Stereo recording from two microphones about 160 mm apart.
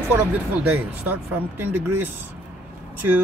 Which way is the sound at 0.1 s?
10° right (ahead or behind).